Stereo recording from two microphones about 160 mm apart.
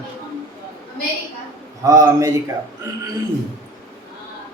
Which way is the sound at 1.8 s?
20° right (ahead or behind).